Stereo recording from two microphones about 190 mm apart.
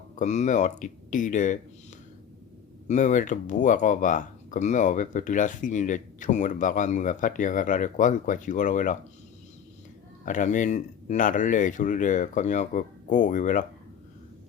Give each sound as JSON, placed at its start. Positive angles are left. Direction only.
{"t": 0.2, "sound": "speech", "side_deg": 40}
{"t": 2.8, "sound": "speech", "side_deg": 40}
{"t": 10.2, "sound": "speech", "side_deg": 40}